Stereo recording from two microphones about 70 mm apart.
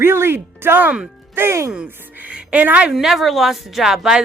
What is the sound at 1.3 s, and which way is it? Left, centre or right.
Speech, right.